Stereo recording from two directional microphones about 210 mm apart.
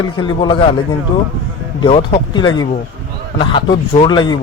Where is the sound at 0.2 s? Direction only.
20° left (ahead or behind).